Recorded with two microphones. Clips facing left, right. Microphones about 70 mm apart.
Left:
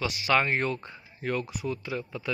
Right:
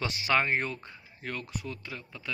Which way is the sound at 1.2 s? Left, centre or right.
Centre.